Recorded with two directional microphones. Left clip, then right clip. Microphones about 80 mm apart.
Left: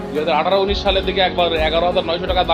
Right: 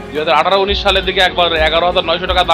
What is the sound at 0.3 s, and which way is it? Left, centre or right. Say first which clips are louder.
Speech: right 5 dB; centre.